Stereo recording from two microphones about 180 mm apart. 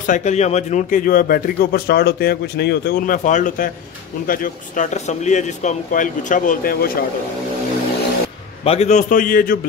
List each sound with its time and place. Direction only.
0.0 s speech: 40° left (ahead or behind); by 3.2 s 60° left (ahead or behind)
3.3 s speech: 45° left (ahead or behind)
8.6 s speech: 35° left (ahead or behind)